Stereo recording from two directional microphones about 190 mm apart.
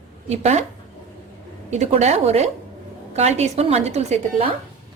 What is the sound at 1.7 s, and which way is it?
A woman's voice, 35° right (ahead or behind).